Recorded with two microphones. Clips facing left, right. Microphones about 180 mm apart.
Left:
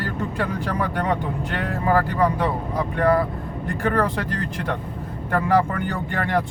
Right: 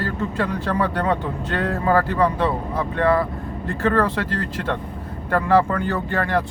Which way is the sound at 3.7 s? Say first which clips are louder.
Right 2 dB; 15° left (ahead or behind).